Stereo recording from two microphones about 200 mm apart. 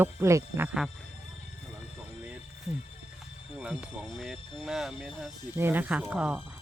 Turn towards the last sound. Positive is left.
turn(degrees=-5)  # may be behind; listen again after turning